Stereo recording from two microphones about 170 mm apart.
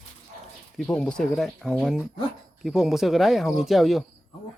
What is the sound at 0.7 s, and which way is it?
Speech, 5° left (ahead or behind).